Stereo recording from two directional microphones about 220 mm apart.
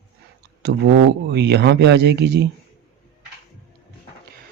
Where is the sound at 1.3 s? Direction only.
50° right (ahead or behind).